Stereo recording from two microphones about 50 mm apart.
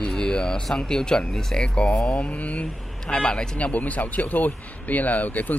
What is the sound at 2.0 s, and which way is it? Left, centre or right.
Speech, left.